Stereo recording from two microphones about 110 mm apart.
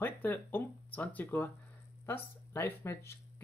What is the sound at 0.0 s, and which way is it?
Speech, 20° left (ahead or behind).